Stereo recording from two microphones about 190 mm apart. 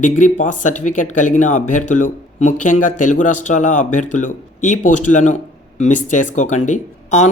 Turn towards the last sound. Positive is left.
turn(degrees=40)  # may be behind; listen again after turning